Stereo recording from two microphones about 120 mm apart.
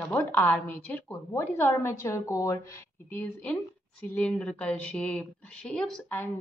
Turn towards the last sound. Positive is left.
turn(degrees=5)  # may be behind; listen again after turning